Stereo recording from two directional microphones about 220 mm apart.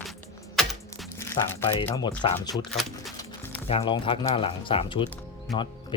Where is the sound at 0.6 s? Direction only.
Centre (ahead or behind).